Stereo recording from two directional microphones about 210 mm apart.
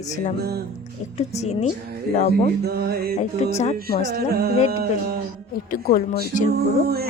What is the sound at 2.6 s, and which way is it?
Music, 50° right (ahead or behind).